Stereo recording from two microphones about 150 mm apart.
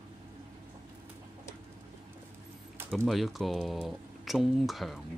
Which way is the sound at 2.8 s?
Centre (ahead or behind).